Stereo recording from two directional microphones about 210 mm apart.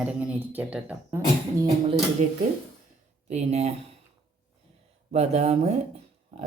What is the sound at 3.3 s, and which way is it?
Speech, 30° right (ahead or behind).